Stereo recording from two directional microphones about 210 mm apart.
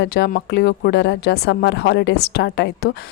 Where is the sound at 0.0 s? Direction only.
50° left (ahead or behind).